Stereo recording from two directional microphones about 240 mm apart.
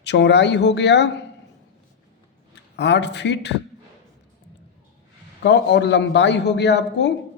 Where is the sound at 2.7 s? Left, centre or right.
Left.